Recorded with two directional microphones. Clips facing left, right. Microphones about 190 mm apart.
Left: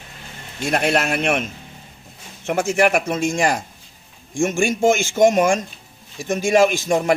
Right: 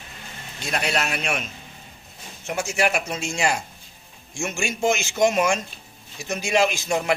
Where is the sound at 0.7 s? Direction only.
55° left (ahead or behind).